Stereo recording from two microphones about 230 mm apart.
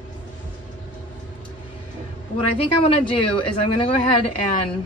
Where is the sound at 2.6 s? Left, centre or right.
Left.